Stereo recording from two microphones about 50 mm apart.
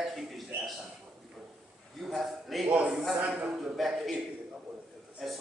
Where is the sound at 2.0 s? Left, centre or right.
Centre.